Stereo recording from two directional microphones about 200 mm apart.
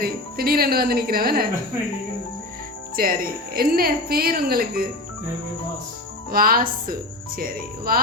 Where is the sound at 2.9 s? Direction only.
50° right (ahead or behind).